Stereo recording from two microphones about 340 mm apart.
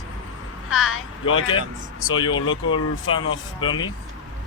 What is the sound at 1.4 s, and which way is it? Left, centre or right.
Speech, centre.